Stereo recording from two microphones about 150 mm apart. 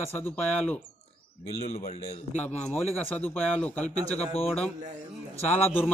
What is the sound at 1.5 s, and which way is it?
Speech, 45° left (ahead or behind).